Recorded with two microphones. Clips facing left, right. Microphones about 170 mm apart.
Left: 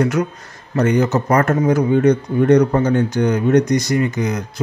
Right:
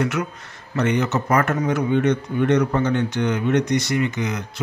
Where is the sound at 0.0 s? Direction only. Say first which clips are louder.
Left 5 dB; 40° left (ahead or behind).